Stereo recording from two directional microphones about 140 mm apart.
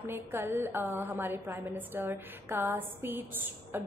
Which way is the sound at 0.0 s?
15° right (ahead or behind).